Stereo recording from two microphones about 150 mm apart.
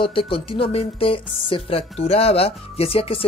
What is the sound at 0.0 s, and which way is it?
Speech, 35° left (ahead or behind).